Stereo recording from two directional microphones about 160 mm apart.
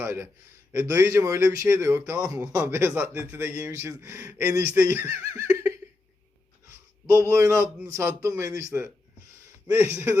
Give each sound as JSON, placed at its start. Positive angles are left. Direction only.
{"t": 0.0, "sound": "a man's voice", "side_deg": -15}